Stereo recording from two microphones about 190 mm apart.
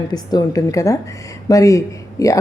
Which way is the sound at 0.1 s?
20° left (ahead or behind).